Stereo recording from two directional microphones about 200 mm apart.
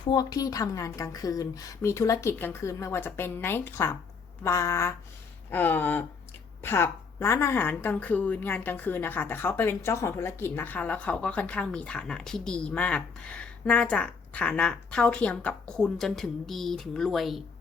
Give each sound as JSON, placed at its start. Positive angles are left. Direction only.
{"t": 0.0, "sound": "a woman's voice", "side_deg": 20}